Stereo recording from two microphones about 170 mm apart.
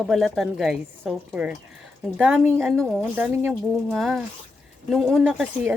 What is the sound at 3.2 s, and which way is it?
Speech, 10° right (ahead or behind).